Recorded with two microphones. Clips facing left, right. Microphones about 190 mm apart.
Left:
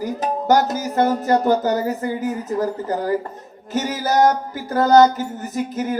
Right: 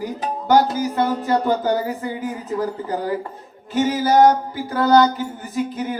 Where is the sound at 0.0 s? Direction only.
45° left (ahead or behind).